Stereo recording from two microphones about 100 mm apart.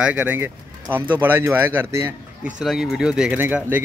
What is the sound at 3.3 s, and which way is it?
Speech, 20° right (ahead or behind).